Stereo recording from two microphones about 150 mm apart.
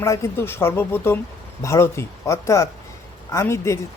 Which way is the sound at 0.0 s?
20° left (ahead or behind).